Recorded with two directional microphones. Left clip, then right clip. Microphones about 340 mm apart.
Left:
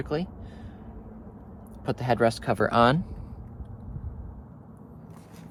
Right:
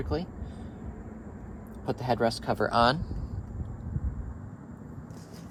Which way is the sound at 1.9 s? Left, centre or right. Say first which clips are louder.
Left 3 dB; left.